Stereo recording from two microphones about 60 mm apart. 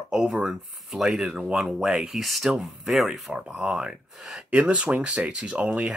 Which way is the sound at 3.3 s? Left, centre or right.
Centre.